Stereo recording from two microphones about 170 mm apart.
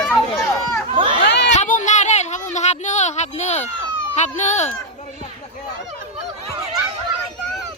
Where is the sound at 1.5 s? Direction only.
45° left (ahead or behind).